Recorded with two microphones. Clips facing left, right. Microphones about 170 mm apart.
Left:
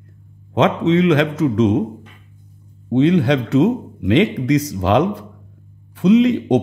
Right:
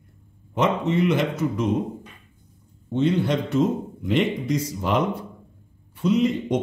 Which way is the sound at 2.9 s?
90° left.